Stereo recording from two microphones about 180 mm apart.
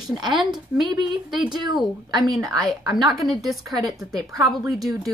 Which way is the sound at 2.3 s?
Centre (ahead or behind).